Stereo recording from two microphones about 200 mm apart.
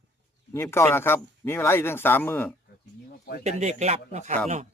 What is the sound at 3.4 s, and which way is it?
Speech, 35° right (ahead or behind).